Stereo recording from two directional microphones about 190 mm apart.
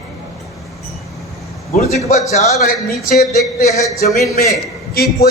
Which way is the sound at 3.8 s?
15° left (ahead or behind).